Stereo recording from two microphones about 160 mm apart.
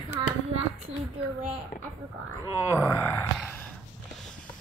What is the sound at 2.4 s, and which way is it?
Groan, 15° right (ahead or behind).